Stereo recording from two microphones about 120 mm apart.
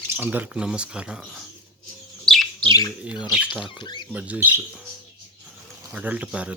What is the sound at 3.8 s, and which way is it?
Speech, 40° left (ahead or behind).